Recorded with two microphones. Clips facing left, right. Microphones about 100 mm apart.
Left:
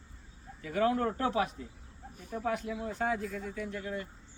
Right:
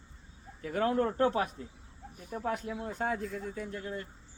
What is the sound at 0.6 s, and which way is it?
Speech, 40° right (ahead or behind).